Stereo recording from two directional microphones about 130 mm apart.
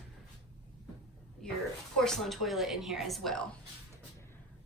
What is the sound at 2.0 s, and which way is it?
A child's voice, centre (ahead or behind).